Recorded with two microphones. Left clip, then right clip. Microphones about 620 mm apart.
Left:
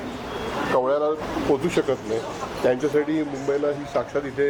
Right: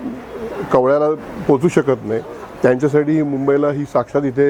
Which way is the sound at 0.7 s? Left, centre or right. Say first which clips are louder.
Right 8 dB; right.